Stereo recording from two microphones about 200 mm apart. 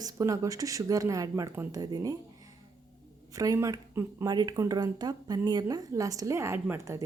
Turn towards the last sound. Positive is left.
turn(degrees=-15)  # may be behind; listen again after turning